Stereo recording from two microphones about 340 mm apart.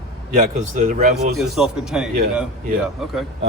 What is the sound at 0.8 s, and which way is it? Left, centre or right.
Speech, right.